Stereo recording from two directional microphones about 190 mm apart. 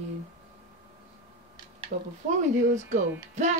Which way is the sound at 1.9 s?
55° right (ahead or behind).